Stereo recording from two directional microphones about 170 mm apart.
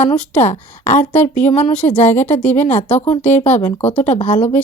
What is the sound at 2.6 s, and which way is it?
Speech, 45° left (ahead or behind).